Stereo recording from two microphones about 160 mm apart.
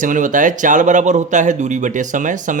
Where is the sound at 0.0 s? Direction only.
55° right (ahead or behind).